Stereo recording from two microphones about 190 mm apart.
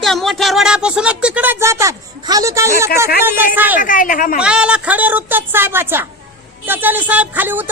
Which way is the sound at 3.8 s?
45° left (ahead or behind).